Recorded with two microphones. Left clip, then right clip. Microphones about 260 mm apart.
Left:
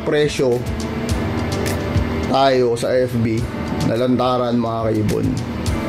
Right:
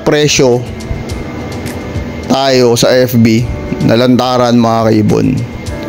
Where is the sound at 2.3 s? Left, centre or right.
Right.